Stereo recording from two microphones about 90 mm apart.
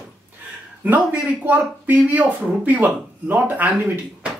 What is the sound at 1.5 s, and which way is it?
Speech, 20° right (ahead or behind).